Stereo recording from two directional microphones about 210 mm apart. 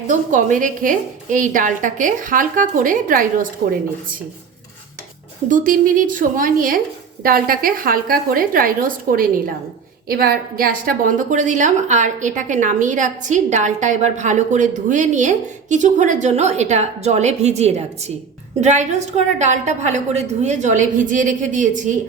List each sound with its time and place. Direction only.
0.1 s a woman's voice: 35° right (ahead or behind)
5.5 s a woman's voice: 40° right (ahead or behind)